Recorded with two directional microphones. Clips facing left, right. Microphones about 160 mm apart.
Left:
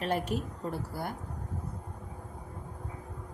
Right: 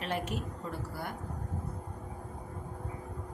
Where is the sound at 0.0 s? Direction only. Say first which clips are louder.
Left 4 dB; 40° left (ahead or behind).